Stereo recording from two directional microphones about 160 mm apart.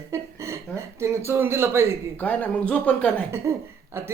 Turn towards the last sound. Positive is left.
turn(degrees=-15)  # may be behind; listen again after turning